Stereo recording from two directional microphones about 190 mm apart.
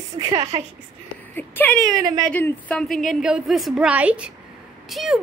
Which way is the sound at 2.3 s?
5° left (ahead or behind).